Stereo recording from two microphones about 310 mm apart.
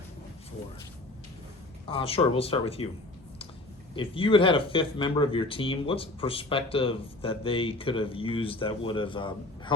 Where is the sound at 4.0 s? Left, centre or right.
Centre.